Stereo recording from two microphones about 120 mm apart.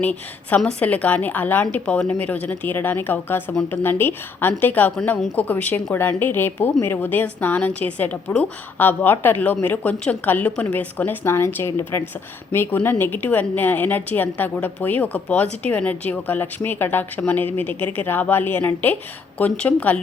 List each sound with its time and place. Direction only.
0.0 s a woman's voice: 10° left (ahead or behind)